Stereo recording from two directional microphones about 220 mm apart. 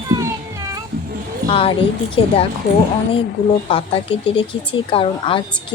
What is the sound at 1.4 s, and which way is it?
A woman's voice, 25° left (ahead or behind).